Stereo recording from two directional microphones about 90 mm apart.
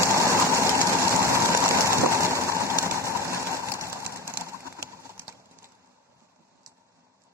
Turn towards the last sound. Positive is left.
turn(degrees=-25)  # may be behind; listen again after turning